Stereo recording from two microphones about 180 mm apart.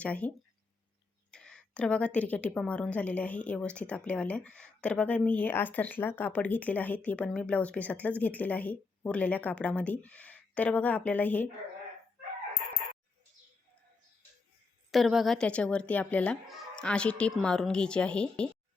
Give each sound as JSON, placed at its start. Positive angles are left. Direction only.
{"t": 0.0, "sound": "a woman's voice", "side_deg": 10}
{"t": 14.8, "sound": "a woman's voice", "side_deg": 0}